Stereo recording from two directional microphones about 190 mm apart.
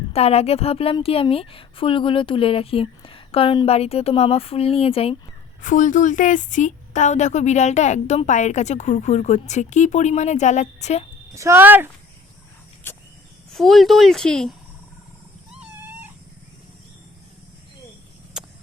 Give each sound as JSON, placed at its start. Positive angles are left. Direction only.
{"t": 0.1, "sound": "a woman's voice", "side_deg": 30}
{"t": 5.6, "sound": "a woman's voice", "side_deg": 40}
{"t": 11.3, "sound": "speech", "side_deg": -15}
{"t": 13.5, "sound": "speech", "side_deg": 0}
{"t": 15.6, "sound": "cat", "side_deg": -10}